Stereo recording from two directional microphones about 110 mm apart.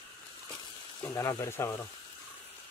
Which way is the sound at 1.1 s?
25° left (ahead or behind).